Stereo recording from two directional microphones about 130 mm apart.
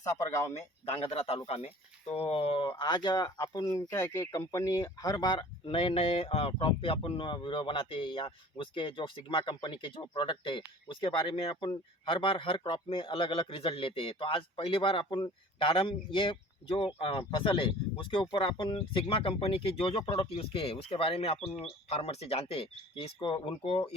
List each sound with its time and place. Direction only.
0.0 s speech: 25° left (ahead or behind)
0.9 s a man's voice: 50° left (ahead or behind)